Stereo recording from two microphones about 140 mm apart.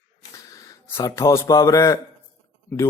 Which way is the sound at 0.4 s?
25° left (ahead or behind).